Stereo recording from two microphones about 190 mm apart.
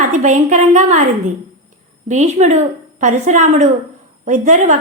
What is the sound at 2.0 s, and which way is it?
A woman's voice, 40° right (ahead or behind).